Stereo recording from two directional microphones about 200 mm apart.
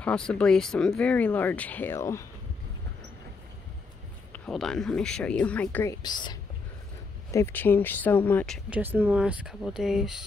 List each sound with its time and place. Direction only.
0.0 s speech: 5° left (ahead or behind)
4.3 s speech: 5° left (ahead or behind)
6.0 s speech: 20° left (ahead or behind)
8.6 s speech: 10° right (ahead or behind)